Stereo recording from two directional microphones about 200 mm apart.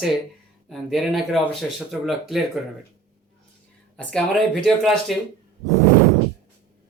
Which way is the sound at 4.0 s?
5° left (ahead or behind).